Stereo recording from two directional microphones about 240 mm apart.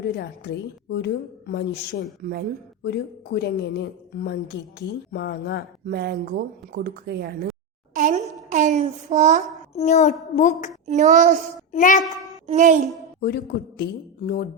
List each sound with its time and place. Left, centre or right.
0.2 s a woman's voice: left
5.9 s speech: right
7.9 s a sound: right
9.7 s a child's voice: left
10.8 s a child's voice: right
11.7 s speech: left
12.5 s speech: right
13.1 s speech: left